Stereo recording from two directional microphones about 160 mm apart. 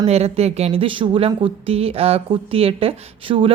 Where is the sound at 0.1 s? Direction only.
40° right (ahead or behind).